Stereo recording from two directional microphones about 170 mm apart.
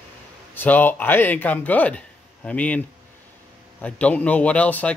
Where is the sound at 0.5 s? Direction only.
10° left (ahead or behind).